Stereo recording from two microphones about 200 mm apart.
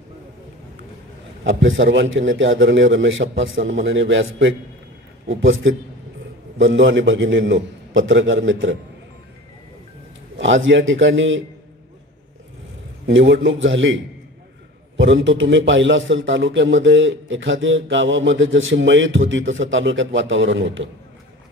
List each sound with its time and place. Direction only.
1.4 s a man's voice: 70° right (ahead or behind)
10.3 s a man's voice: 70° right (ahead or behind)
13.0 s a man's voice: 70° right (ahead or behind)